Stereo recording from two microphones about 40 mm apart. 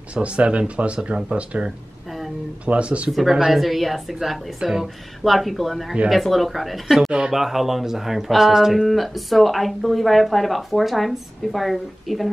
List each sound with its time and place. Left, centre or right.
0.1 s speech: right
3.1 s speech: centre
7.1 s speech: right
7.3 s speech: centre